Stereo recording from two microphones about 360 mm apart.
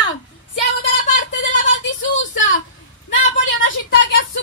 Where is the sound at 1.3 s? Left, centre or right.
Left.